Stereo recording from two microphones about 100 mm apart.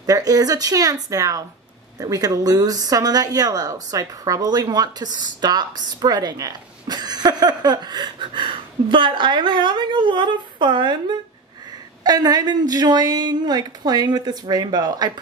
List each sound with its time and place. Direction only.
0.0 s speech: 40° right (ahead or behind)